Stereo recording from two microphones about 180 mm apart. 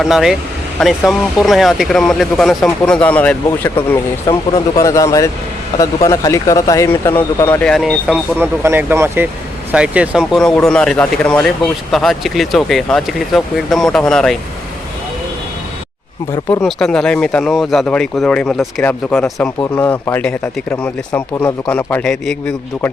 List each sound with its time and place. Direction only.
0.0 s a man's voice: centre (ahead or behind)
16.6 s a man's voice: 5° left (ahead or behind)